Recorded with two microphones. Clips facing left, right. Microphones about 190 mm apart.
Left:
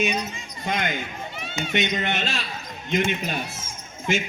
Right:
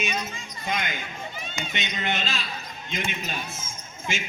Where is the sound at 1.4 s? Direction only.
65° left (ahead or behind).